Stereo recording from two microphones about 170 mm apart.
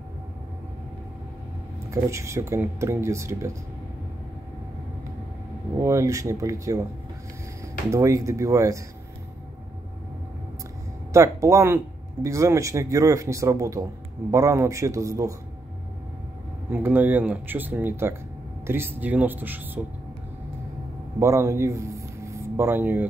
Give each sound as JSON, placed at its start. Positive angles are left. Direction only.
{"t": 1.9, "sound": "speech", "side_deg": -15}
{"t": 5.8, "sound": "speech", "side_deg": -15}
{"t": 7.9, "sound": "speech", "side_deg": -20}
{"t": 11.1, "sound": "speech", "side_deg": -15}
{"t": 16.7, "sound": "speech", "side_deg": -10}
{"t": 21.2, "sound": "speech", "side_deg": -15}